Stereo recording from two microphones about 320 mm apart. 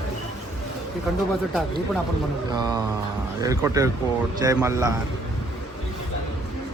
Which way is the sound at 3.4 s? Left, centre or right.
Centre.